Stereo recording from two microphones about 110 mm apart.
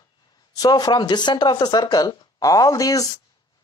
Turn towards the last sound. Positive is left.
turn(degrees=30)  # may be behind; listen again after turning